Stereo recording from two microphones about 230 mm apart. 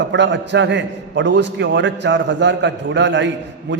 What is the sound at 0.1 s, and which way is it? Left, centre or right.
A man's voice, right.